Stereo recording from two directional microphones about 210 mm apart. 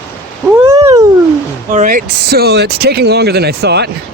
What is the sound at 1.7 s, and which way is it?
Speech, 40° right (ahead or behind).